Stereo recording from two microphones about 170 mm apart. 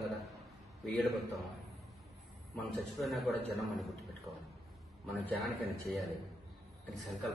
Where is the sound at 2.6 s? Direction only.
Centre (ahead or behind).